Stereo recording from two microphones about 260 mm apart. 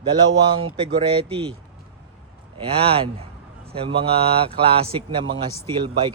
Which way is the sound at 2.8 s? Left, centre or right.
Right.